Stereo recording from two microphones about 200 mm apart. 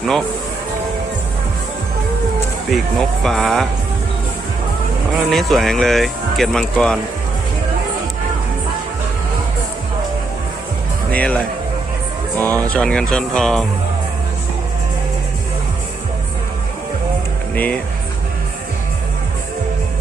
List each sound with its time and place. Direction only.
2.6 s speech: centre (ahead or behind)
5.3 s speech: centre (ahead or behind)
11.1 s speech: 5° left (ahead or behind)
12.4 s speech: 10° left (ahead or behind)
17.5 s speech: 10° left (ahead or behind)